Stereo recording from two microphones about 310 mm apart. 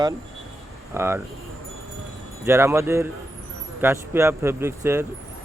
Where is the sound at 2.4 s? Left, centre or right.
Centre.